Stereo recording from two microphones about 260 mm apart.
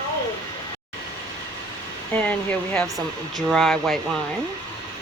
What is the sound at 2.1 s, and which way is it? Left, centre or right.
Speech, centre.